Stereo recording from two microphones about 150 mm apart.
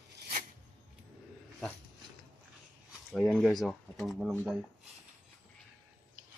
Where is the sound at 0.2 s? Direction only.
65° right (ahead or behind).